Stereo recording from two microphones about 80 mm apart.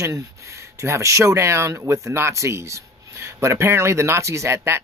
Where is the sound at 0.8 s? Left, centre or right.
Right.